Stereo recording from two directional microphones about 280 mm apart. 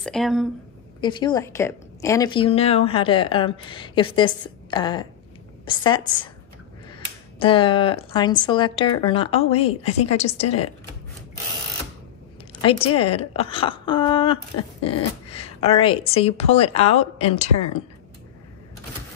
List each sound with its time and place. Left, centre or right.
0.0 s speech: centre
1.0 s a woman's voice: centre
7.3 s a woman's voice: centre
12.6 s a woman's voice: centre